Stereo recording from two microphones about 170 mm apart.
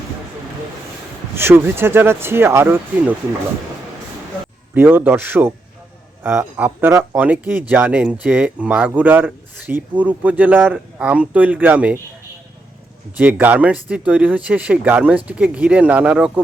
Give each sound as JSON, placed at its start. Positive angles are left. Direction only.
{"t": 1.4, "sound": "speech", "side_deg": -15}
{"t": 4.7, "sound": "speech", "side_deg": -10}
{"t": 13.1, "sound": "speech", "side_deg": -10}